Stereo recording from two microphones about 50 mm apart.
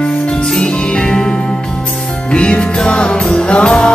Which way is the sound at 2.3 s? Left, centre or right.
Left.